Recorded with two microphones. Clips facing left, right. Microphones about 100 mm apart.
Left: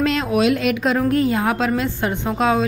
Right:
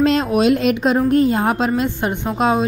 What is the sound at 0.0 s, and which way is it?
A woman's voice, 25° right (ahead or behind).